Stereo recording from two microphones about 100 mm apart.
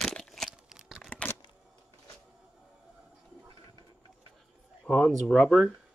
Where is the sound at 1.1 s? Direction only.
15° left (ahead or behind).